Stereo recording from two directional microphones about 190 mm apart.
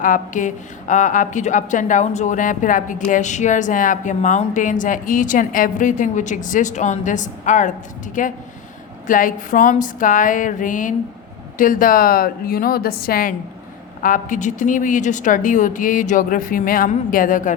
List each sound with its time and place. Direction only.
0.0 s a woman's voice: 45° left (ahead or behind)